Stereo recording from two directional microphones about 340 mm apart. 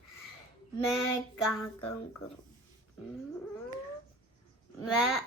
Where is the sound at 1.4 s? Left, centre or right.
Centre.